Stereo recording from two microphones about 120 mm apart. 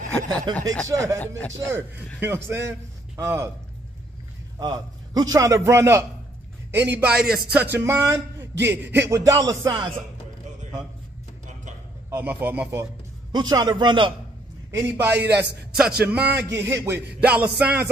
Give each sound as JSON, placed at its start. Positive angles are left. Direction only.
{"t": 0.3, "sound": "a man's voice", "side_deg": -35}
{"t": 0.8, "sound": "a man's voice", "side_deg": -25}
{"t": 4.6, "sound": "a man's voice", "side_deg": -35}
{"t": 9.2, "sound": "a man's voice", "side_deg": -30}
{"t": 9.7, "sound": "speech", "side_deg": -45}
{"t": 12.1, "sound": "a man's voice", "side_deg": -15}
{"t": 13.3, "sound": "a man's voice", "side_deg": -35}
{"t": 14.7, "sound": "a man's voice", "side_deg": -20}
{"t": 16.4, "sound": "a man's voice", "side_deg": -25}
{"t": 17.3, "sound": "a man's voice", "side_deg": -10}